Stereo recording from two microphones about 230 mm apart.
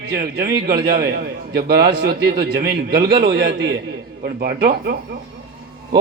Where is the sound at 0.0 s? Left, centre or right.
Right.